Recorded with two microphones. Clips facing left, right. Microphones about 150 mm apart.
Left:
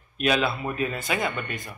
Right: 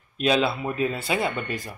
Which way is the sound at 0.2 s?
25° right (ahead or behind).